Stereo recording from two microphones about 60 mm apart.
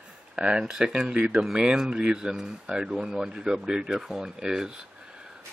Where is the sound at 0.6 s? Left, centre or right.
Centre.